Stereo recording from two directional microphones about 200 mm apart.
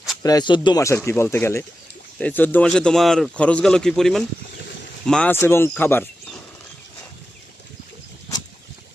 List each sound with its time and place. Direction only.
0.2 s speech: 20° left (ahead or behind)